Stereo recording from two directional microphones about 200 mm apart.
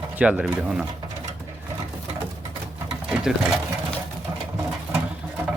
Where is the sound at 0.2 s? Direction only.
5° right (ahead or behind).